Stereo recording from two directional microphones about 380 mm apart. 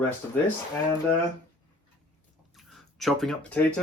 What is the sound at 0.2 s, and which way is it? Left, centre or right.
Speech, centre.